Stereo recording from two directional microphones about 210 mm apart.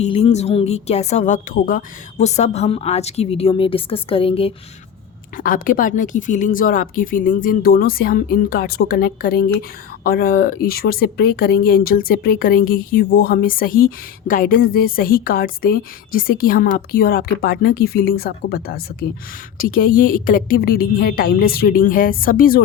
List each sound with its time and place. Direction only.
0.0 s a woman's voice: 30° left (ahead or behind)
5.4 s speech: 40° left (ahead or behind)